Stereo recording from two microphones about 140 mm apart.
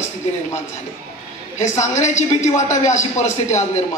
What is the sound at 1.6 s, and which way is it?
A woman's voice, 60° left (ahead or behind).